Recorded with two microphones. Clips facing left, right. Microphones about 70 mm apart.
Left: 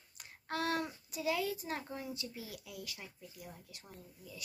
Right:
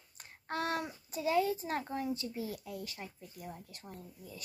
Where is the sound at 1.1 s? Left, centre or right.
Right.